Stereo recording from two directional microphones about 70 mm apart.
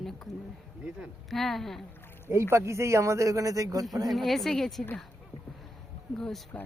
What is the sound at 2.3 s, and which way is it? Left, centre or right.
Speech, right.